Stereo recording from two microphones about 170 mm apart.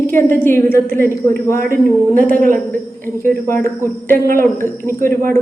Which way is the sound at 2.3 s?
55° right (ahead or behind).